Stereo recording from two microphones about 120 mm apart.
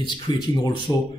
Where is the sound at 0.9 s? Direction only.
25° left (ahead or behind).